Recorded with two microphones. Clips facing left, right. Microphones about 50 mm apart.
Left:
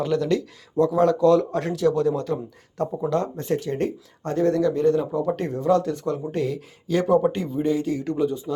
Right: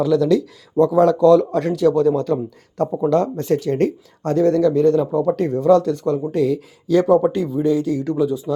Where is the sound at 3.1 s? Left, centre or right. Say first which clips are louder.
Right 7 dB; right.